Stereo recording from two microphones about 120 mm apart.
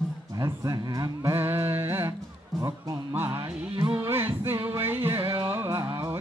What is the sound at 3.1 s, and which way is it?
Music, 20° right (ahead or behind).